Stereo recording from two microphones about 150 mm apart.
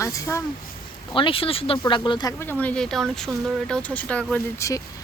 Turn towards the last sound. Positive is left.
turn(degrees=20)  # may be behind; listen again after turning